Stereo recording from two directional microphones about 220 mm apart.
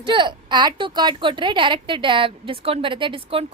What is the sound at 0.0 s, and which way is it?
A woman's voice, 20° right (ahead or behind).